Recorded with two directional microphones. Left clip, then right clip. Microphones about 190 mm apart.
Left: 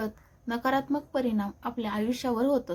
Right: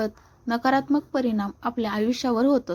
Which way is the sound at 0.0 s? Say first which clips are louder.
Right 7 dB; 25° right (ahead or behind).